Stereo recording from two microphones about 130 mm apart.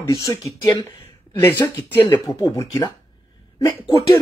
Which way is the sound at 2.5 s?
20° left (ahead or behind).